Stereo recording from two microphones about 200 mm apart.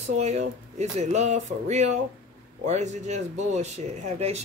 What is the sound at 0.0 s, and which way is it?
Speech, 35° right (ahead or behind).